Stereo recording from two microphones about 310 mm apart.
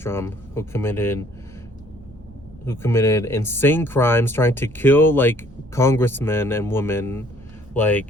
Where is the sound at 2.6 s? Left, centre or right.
Centre.